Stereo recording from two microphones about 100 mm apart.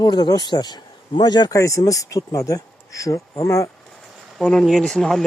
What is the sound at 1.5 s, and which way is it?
Speech, 30° left (ahead or behind).